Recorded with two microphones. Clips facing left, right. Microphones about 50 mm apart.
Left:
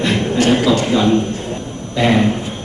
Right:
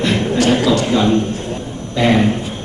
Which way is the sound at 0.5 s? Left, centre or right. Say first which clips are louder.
Even; left.